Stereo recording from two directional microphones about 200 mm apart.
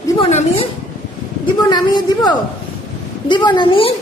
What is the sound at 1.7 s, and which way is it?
A woman's voice, 20° left (ahead or behind).